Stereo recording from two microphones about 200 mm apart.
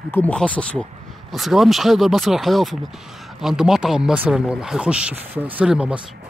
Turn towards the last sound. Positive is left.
turn(degrees=-5)  # may be behind; listen again after turning